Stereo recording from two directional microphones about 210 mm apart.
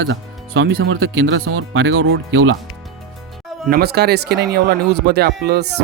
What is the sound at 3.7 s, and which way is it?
Speech, 50° right (ahead or behind).